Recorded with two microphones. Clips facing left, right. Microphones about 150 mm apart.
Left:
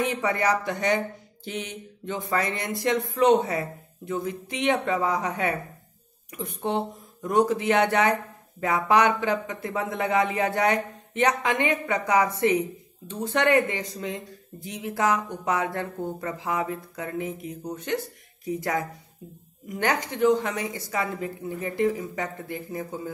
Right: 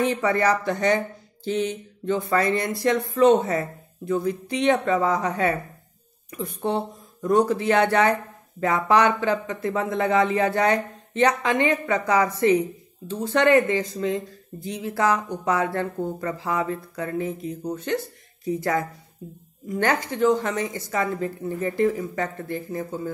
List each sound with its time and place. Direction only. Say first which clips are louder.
0.2 s speech: right 3 dB; 15° left (ahead or behind)